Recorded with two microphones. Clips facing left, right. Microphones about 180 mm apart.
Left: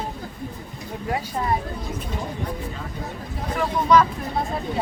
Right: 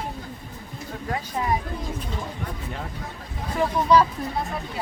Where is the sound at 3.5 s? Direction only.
30° right (ahead or behind).